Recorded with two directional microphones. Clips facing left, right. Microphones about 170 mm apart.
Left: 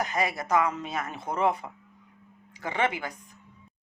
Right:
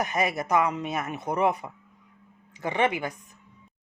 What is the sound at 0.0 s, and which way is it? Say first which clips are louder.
Speech: right 2 dB; 20° right (ahead or behind).